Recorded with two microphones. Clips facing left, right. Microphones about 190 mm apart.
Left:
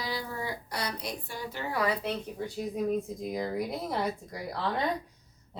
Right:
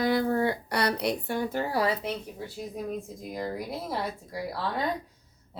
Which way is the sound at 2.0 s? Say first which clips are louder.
Left 1 dB; 5° right (ahead or behind).